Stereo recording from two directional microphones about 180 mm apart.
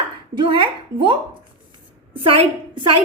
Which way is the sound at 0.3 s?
30° right (ahead or behind).